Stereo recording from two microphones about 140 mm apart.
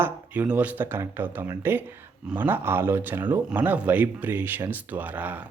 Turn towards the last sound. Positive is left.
turn(degrees=-10)  # may be behind; listen again after turning